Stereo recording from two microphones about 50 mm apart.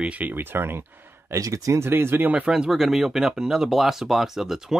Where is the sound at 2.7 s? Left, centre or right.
Centre.